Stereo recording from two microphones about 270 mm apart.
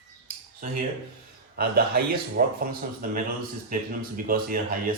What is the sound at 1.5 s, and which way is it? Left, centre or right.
Speech, right.